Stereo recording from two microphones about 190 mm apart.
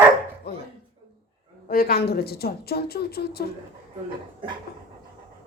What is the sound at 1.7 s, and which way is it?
A woman's voice, 50° left (ahead or behind).